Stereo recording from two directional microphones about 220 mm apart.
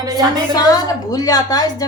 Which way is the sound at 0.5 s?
15° left (ahead or behind).